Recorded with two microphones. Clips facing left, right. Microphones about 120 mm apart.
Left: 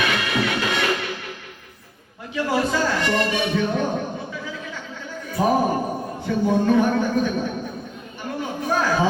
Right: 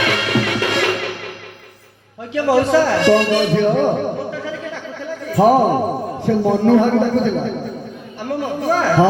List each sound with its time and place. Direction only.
0.0 s music: 75° right (ahead or behind)
2.3 s a man's voice: 80° right
8.4 s chatter: 80° right